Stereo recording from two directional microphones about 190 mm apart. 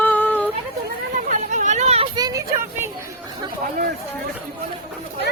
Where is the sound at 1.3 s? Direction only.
40° right (ahead or behind).